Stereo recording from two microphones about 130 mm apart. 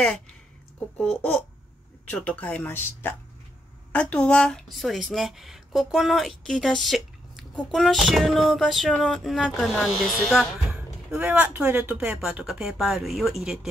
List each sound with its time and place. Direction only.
0.9 s speech: 5° left (ahead or behind)
10.7 s speech: 10° right (ahead or behind)